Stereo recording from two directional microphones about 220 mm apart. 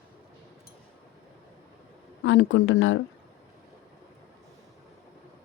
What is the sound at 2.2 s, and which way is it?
Speech, 60° left (ahead or behind).